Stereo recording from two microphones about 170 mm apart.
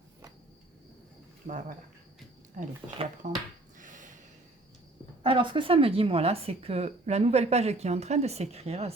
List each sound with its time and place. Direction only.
1.5 s speech: 50° right (ahead or behind)
3.2 s speech: 50° right (ahead or behind)
3.8 s a sound: 50° right (ahead or behind)
5.2 s speech: 30° right (ahead or behind)